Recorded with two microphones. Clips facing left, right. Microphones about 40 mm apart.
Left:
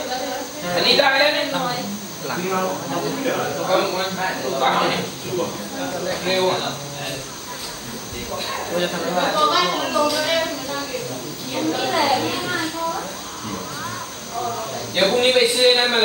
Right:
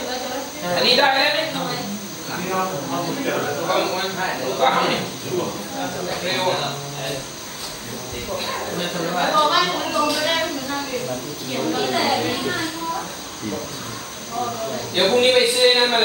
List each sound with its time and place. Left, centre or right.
0.6 s speech: centre
8.7 s speech: centre
9.1 s speech: centre
9.9 s music: centre
11.5 s a child's voice: centre
15.1 s speech: centre